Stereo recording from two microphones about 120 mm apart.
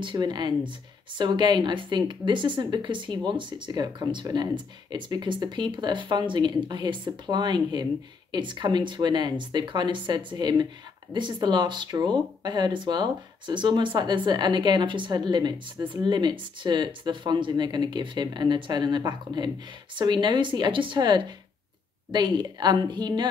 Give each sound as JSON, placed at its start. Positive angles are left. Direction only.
{"t": 0.0, "sound": "speech", "side_deg": -40}